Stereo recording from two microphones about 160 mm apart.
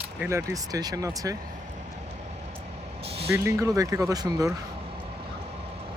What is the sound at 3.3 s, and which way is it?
Speech, 20° right (ahead or behind).